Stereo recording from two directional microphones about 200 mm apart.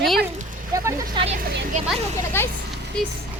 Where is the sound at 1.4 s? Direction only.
45° right (ahead or behind).